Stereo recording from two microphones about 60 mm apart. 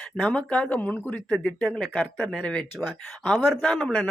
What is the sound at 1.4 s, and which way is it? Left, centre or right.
Speech, centre.